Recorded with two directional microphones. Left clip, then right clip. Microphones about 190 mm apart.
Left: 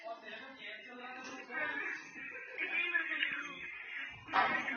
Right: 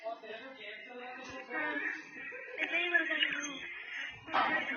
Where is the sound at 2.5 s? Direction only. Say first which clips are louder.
Right 4 dB; 50° right (ahead or behind).